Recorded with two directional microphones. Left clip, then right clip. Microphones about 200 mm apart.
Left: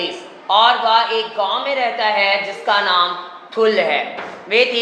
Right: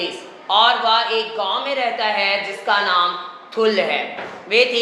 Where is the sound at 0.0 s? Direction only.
15° right (ahead or behind).